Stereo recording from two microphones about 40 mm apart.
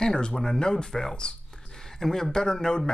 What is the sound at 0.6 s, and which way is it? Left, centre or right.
Speech, centre.